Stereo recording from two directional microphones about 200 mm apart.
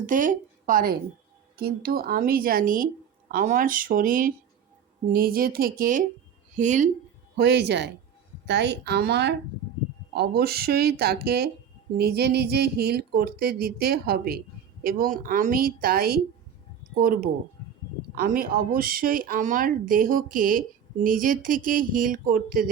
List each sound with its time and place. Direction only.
0.0 s a woman's voice: 40° right (ahead or behind)
7.4 s speech: 55° right (ahead or behind)